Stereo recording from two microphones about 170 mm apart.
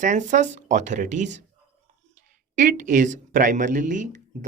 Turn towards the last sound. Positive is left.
turn(degrees=-50)  # may be behind; listen again after turning